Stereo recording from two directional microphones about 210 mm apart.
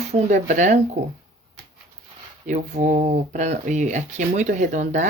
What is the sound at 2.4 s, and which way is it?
Speech, 35° right (ahead or behind).